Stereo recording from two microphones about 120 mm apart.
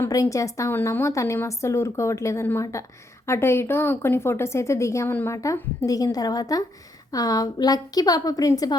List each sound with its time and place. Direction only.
0.0 s a woman's voice: 25° left (ahead or behind)